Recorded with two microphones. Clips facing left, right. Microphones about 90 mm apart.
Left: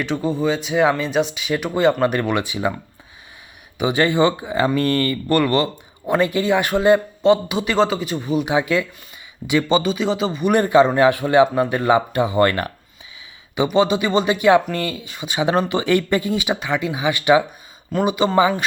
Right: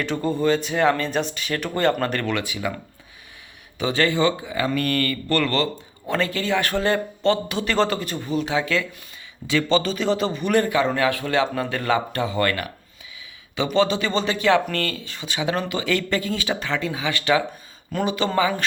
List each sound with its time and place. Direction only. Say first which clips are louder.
0.0 s a man's voice: left 1 dB; centre (ahead or behind)
10.5 s a man's voice: left 6 dB; 20° left (ahead or behind)
13.7 s speech: left 3 dB; 10° left (ahead or behind)